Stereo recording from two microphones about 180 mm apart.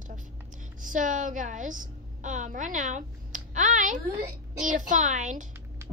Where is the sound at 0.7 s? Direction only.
45° right (ahead or behind).